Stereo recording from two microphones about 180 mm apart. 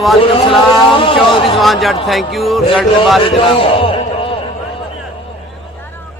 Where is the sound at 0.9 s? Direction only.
30° left (ahead or behind).